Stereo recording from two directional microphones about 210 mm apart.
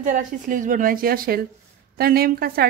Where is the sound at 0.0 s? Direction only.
40° right (ahead or behind).